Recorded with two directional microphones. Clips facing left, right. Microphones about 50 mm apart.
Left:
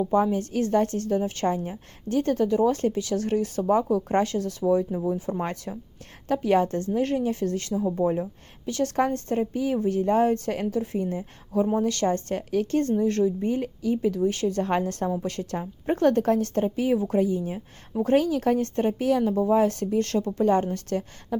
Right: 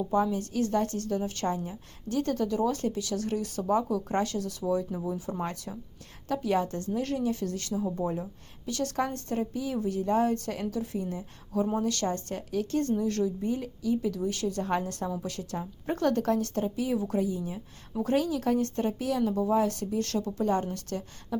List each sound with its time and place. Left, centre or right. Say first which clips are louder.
0.1 s speech: left 4 dB; left